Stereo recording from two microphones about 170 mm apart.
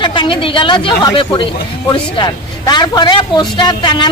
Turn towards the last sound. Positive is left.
turn(degrees=25)  # may be behind; listen again after turning